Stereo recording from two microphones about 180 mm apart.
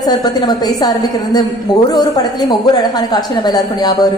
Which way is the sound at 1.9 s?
20° left (ahead or behind).